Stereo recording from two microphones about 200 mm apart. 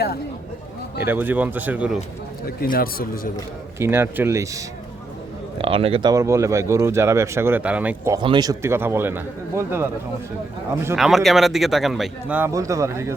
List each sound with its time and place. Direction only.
1.0 s speech: 10° right (ahead or behind)
2.6 s speech: 45° left (ahead or behind)
3.8 s speech: 10° right (ahead or behind)
5.5 s speech: 25° right (ahead or behind); by 8.2 s 10° right (ahead or behind)
8.2 s speech: 20° right (ahead or behind)
10.9 s a man's voice: centre (ahead or behind)